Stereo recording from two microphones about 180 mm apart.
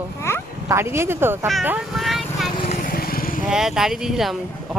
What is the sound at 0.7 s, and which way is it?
Speech, 15° right (ahead or behind).